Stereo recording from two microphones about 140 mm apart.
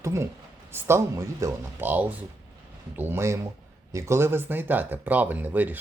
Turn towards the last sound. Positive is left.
turn(degrees=-10)  # may be behind; listen again after turning